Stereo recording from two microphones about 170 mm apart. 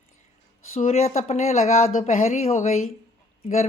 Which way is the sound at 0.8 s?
40° left (ahead or behind).